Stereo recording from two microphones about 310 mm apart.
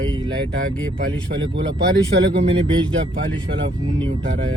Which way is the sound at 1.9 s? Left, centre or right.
Right.